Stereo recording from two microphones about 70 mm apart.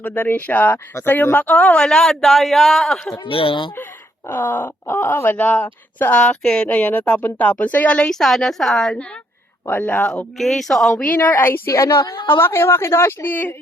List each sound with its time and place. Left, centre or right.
0.0 s speech: left; by 3.2 s centre
4.3 s speech: left; by 9.0 s centre
9.6 s speech: left
10.3 s speech: centre
11.2 s a woman's voice: left
11.7 s a woman's voice: left